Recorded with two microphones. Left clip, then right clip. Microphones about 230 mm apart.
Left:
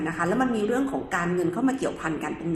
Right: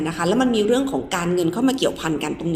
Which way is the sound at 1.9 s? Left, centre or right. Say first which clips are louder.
Right 6 dB; right.